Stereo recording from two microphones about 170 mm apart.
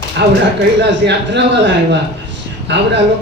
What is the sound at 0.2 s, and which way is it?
Speech, 90° right.